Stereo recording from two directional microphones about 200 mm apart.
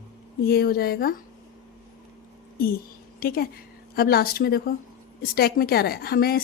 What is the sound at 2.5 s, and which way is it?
A woman's voice, 50° left (ahead or behind).